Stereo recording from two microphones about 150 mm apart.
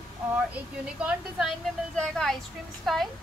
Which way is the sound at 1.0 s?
5° right (ahead or behind).